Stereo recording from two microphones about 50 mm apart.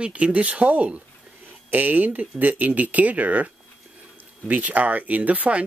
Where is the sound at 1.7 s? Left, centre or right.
Right.